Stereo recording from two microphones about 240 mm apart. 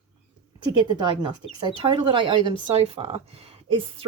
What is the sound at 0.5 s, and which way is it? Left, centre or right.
Speech, centre.